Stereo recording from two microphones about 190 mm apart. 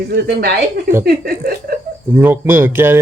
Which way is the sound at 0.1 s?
55° right (ahead or behind).